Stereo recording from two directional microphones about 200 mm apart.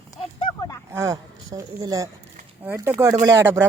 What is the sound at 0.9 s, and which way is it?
A man's voice, 15° right (ahead or behind).